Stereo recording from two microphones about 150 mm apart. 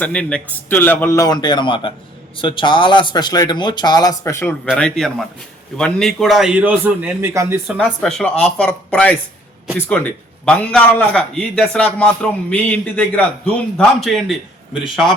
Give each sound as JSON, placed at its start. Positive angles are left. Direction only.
{"t": 0.0, "sound": "a man's voice", "side_deg": 10}
{"t": 4.7, "sound": "a man's voice", "side_deg": 5}
{"t": 7.7, "sound": "a man's voice", "side_deg": -5}